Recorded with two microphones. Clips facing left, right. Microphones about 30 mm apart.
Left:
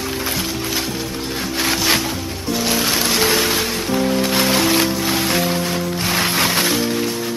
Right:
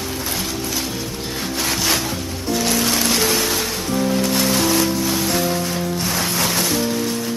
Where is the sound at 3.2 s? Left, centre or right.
Left.